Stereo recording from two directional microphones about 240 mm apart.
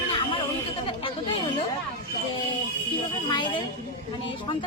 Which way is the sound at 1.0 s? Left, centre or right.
Centre.